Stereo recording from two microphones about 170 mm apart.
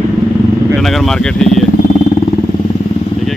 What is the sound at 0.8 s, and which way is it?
Speech, centre (ahead or behind).